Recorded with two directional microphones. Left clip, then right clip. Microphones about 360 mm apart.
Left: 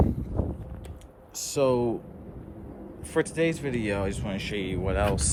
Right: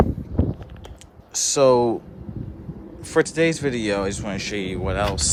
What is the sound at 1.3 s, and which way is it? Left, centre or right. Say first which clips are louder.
Speech: right 9 dB; centre.